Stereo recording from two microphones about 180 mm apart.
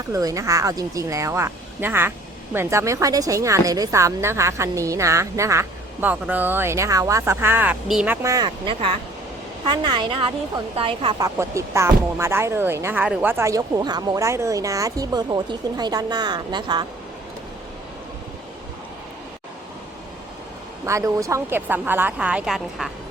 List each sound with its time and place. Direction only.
0.1 s speech: 20° right (ahead or behind)
11.3 s speech: 15° right (ahead or behind)
20.8 s speech: 15° right (ahead or behind)